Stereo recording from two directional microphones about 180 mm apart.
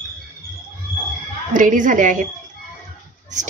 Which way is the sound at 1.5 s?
45° right (ahead or behind).